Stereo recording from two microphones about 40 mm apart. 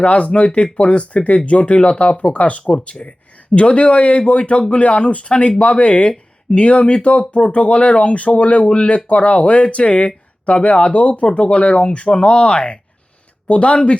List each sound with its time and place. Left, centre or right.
0.0 s speech: left